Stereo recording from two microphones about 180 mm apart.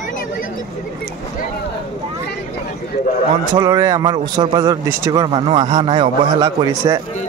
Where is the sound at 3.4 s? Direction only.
20° right (ahead or behind).